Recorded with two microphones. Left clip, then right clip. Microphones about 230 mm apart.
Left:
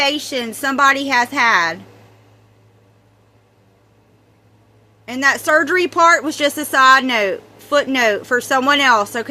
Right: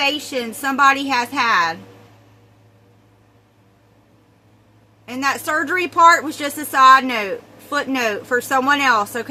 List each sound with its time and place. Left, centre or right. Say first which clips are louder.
0.0 s a woman's voice: left 2 dB; left
5.0 s a woman's voice: left 5 dB; left